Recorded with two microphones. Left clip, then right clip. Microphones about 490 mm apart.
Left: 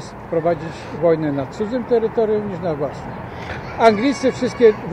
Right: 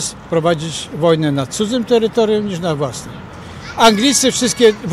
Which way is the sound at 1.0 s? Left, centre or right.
Right.